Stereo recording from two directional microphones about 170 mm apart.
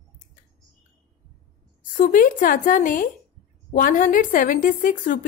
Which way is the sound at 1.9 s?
55° left (ahead or behind).